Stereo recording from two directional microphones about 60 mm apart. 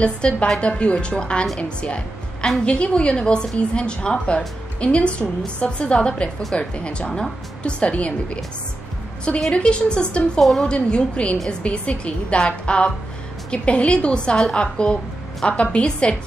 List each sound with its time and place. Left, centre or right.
0.0 s a woman's voice: centre
9.4 s a woman's voice: centre
10.7 s a woman's voice: centre